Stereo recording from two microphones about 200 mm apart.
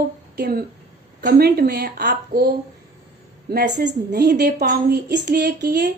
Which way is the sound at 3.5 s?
55° right (ahead or behind).